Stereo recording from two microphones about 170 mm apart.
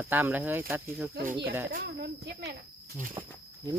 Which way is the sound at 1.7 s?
75° right (ahead or behind).